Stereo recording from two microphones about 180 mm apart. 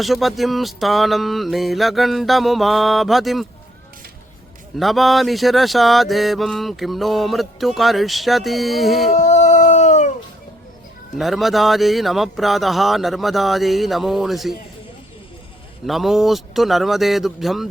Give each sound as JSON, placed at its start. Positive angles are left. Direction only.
{"t": 0.0, "sound": "mantra", "side_deg": 0}
{"t": 4.8, "sound": "mantra", "side_deg": 0}
{"t": 9.1, "sound": "dog", "side_deg": 40}
{"t": 11.2, "sound": "mantra", "side_deg": 0}
{"t": 15.9, "sound": "mantra", "side_deg": 0}